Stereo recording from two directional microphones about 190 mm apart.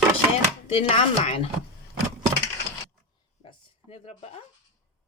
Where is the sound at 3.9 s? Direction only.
35° left (ahead or behind).